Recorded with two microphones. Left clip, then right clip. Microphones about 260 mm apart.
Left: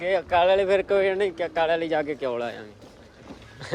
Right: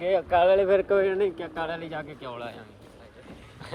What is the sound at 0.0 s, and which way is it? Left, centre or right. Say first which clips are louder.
Speech: left 1 dB; centre.